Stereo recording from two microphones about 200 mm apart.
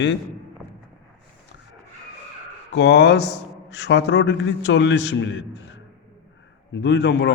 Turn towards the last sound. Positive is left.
turn(degrees=60)  # may be behind; listen again after turning